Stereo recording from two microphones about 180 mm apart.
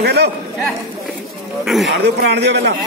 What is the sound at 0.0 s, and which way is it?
Speech, 65° right (ahead or behind).